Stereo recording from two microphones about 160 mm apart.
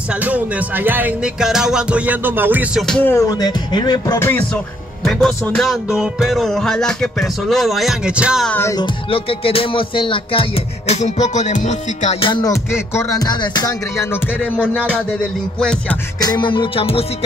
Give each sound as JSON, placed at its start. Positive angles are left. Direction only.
{"t": 0.1, "sound": "speech", "side_deg": -10}
{"t": 2.9, "sound": "music", "side_deg": 10}
{"t": 5.6, "sound": "speech", "side_deg": 0}
{"t": 8.5, "sound": "music", "side_deg": 15}
{"t": 8.7, "sound": "music", "side_deg": 30}
{"t": 12.3, "sound": "music", "side_deg": 25}
{"t": 15.6, "sound": "speech", "side_deg": 5}
{"t": 16.2, "sound": "music", "side_deg": 25}